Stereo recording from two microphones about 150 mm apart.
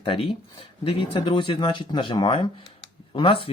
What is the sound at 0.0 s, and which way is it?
Speech, 35° left (ahead or behind).